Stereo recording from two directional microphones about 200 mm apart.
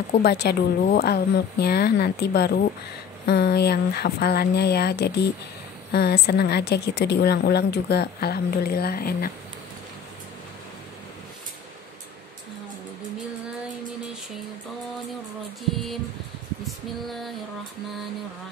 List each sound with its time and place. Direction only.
0.2 s a woman's voice: 55° left (ahead or behind)
16.6 s female singing: centre (ahead or behind)